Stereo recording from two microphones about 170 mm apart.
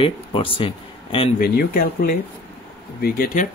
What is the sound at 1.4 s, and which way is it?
Speech, 60° left (ahead or behind).